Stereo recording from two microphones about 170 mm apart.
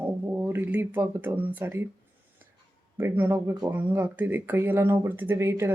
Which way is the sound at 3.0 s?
15° right (ahead or behind).